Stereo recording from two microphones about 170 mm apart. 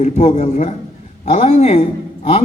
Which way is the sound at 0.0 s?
40° left (ahead or behind).